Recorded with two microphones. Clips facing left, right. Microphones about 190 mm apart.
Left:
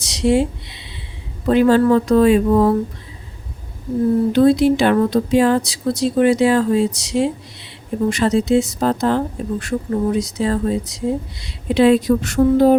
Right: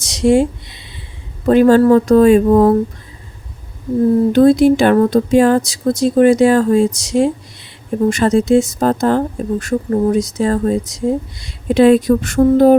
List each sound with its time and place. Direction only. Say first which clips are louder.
0.0 s a sound: right 4 dB; 45° right (ahead or behind)
1.5 s speech: right 4 dB; 45° right (ahead or behind)
4.3 s speech: right 4 dB; 45° right (ahead or behind)